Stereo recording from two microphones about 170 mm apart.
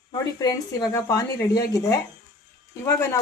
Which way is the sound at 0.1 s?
25° left (ahead or behind).